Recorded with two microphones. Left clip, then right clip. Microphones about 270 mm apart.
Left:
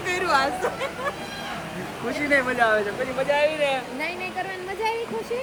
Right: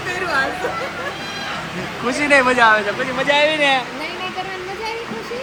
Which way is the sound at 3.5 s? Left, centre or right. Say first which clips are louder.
Right 8 dB; right.